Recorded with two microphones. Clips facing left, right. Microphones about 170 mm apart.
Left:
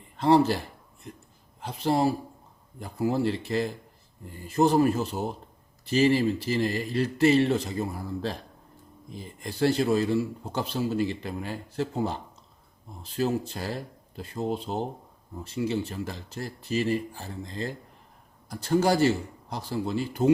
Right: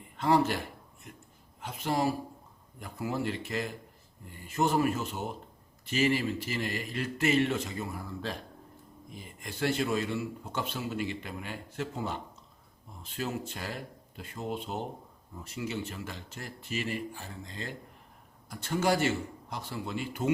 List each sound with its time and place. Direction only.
0.2 s a man's voice: 30° left (ahead or behind)
1.6 s a man's voice: 30° left (ahead or behind)